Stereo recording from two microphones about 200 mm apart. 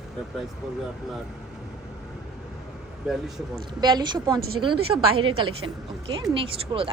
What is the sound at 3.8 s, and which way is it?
Speech, 20° right (ahead or behind).